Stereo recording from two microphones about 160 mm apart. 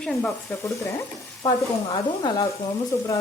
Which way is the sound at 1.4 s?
25° left (ahead or behind).